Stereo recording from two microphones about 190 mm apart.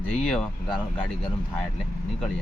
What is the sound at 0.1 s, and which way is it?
Speech, 5° left (ahead or behind).